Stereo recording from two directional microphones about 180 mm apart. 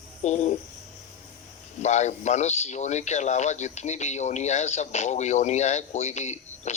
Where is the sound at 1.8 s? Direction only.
40° left (ahead or behind).